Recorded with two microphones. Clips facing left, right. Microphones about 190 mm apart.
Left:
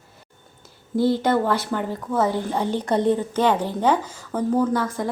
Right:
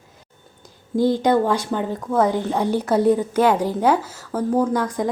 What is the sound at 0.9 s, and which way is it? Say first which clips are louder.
Speech: right 2 dB; 15° right (ahead or behind).